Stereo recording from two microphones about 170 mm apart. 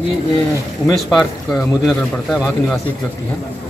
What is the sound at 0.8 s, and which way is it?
Speech, centre (ahead or behind).